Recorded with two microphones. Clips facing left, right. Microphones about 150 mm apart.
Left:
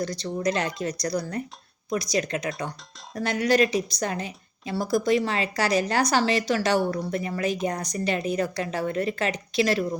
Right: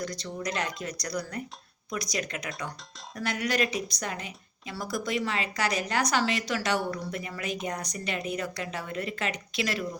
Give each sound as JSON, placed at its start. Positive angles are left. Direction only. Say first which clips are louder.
{"t": 0.0, "sound": "a woman's voice", "louder": "left 7 dB", "side_deg": 30}